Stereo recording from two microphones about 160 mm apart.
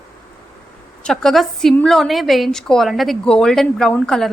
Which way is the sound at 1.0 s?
5° left (ahead or behind).